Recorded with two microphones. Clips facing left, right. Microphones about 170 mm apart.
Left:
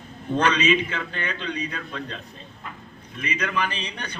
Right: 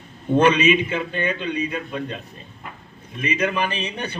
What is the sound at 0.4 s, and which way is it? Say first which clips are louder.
A man's voice: right 3 dB; 10° right (ahead or behind).